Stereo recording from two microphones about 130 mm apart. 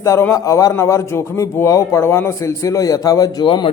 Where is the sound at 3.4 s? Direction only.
40° left (ahead or behind).